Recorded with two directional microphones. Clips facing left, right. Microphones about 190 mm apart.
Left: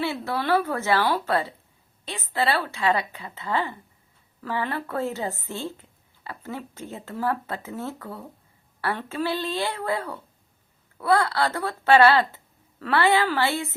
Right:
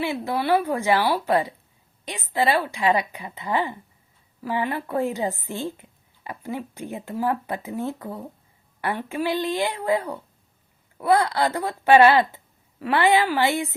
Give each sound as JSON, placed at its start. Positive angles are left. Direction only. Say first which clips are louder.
{"t": 0.0, "sound": "speech", "louder": "right 2 dB", "side_deg": -15}